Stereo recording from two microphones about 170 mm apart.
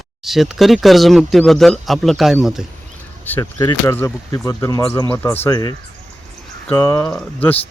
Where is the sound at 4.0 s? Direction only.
15° left (ahead or behind).